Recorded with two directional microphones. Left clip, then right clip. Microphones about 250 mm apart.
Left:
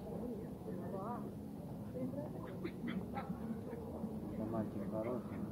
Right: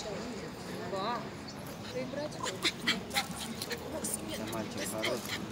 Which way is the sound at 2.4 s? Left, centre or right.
Right.